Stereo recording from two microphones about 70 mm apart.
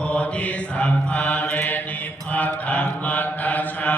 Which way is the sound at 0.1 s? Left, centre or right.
Centre.